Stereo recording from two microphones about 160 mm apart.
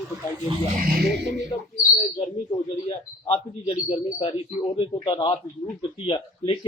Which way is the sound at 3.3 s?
35° left (ahead or behind).